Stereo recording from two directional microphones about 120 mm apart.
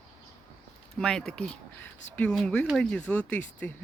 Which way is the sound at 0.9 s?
5° left (ahead or behind).